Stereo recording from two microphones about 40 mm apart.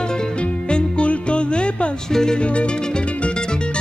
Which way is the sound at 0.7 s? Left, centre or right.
Left.